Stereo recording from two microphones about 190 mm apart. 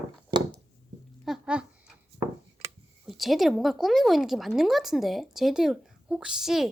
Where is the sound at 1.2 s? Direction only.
5° right (ahead or behind).